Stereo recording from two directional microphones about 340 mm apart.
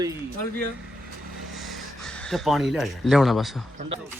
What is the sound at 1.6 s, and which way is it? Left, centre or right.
Speech, centre.